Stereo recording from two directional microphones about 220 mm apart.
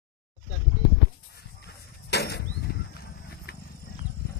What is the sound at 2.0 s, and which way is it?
Vehicle, 50° left (ahead or behind).